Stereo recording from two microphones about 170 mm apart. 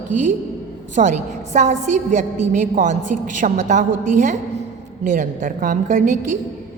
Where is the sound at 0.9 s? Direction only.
45° right (ahead or behind).